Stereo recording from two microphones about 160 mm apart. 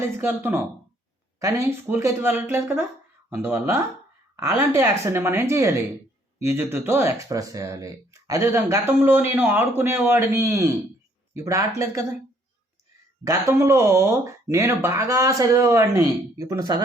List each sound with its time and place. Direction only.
0.0 s speech: 10° right (ahead or behind)
13.2 s speech: 15° right (ahead or behind)